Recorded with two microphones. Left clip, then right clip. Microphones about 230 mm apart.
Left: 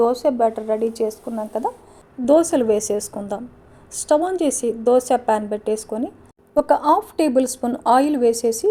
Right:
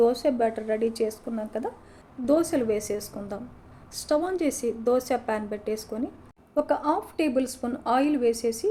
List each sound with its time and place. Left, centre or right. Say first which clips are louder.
0.0 s speech: left 5 dB; centre
2.2 s a woman's voice: left 8 dB; left